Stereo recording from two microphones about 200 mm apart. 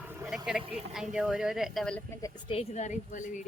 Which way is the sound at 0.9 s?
Centre (ahead or behind).